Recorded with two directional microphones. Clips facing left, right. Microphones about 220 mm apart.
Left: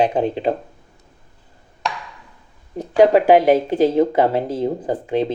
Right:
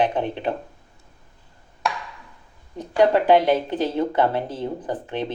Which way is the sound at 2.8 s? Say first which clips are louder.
Left 5 dB; 10° left (ahead or behind).